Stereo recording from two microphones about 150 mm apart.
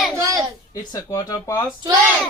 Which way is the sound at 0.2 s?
25° right (ahead or behind).